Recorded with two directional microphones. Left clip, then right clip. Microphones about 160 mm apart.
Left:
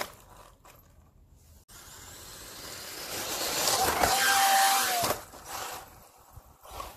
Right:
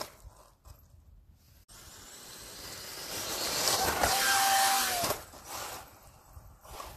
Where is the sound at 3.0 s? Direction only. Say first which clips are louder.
Left 2 dB; 45° left (ahead or behind).